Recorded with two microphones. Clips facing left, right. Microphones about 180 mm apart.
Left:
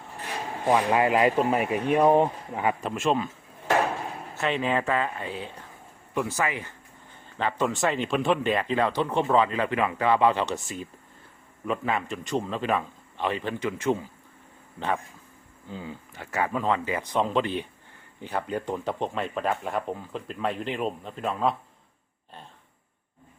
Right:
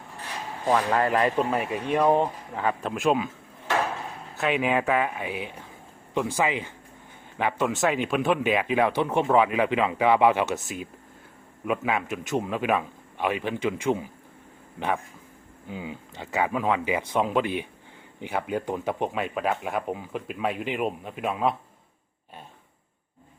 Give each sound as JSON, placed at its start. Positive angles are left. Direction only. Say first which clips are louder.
{"t": 0.7, "sound": "speech", "louder": "left 1 dB", "side_deg": 10}
{"t": 2.8, "sound": "speech", "louder": "right 5 dB", "side_deg": 0}
{"t": 4.4, "sound": "speech", "louder": "right 2 dB", "side_deg": -10}